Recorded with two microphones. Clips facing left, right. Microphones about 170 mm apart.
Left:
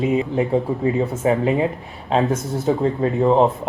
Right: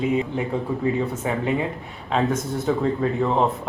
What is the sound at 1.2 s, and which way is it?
Speech, 30° left (ahead or behind).